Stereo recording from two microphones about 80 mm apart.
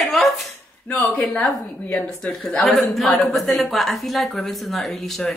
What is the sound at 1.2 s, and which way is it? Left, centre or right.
Speech, centre.